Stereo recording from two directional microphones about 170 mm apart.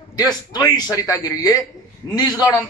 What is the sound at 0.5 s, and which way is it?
A man's voice, 20° left (ahead or behind).